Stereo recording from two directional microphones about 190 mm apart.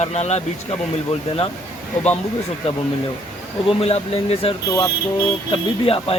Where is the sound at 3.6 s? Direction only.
30° left (ahead or behind).